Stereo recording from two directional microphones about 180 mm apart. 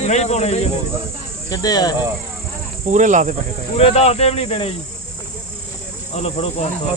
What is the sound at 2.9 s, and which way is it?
Speech, 45° right (ahead or behind).